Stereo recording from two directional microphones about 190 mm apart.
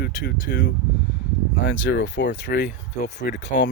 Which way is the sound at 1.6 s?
80° left.